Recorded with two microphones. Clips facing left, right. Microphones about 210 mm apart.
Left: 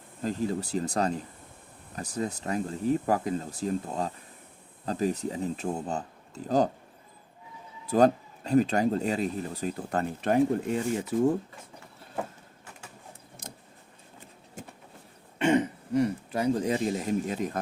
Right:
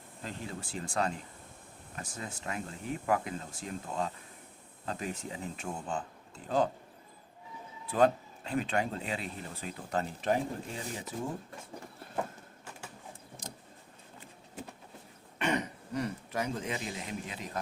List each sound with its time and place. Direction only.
0.2 s speech: 40° left (ahead or behind)
7.9 s speech: 40° left (ahead or behind); by 10.8 s 60° left (ahead or behind)
13.4 s vehicle: 60° left (ahead or behind)
14.6 s vehicle: 45° left (ahead or behind)
15.4 s speech: 25° left (ahead or behind); by 17.6 s 45° left (ahead or behind)